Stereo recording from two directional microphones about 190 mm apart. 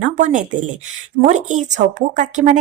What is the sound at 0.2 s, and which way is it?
Speech, 40° right (ahead or behind).